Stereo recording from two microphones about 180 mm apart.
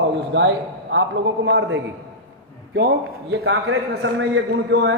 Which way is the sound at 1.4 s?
75° right (ahead or behind).